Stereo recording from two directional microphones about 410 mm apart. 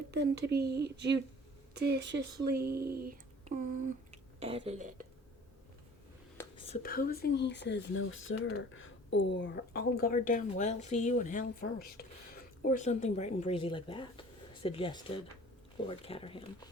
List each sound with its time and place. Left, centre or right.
0.1 s speech: right
6.3 s speech: centre